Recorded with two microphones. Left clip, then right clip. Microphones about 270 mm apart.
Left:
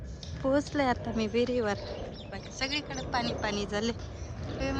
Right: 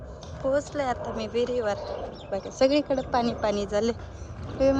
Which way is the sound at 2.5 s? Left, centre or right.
Centre.